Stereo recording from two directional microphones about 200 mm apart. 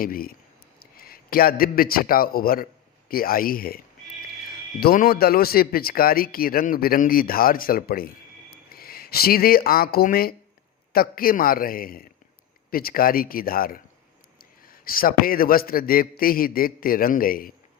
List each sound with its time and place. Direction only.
0.0 s a man's voice: 45° left (ahead or behind)
4.8 s speech: 50° left (ahead or behind)